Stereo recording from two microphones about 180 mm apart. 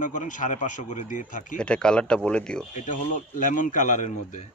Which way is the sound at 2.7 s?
45° left (ahead or behind).